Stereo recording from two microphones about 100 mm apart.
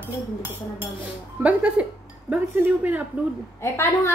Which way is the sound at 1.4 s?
15° right (ahead or behind).